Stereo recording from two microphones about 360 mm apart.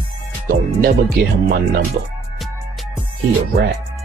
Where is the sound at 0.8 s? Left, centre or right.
Right.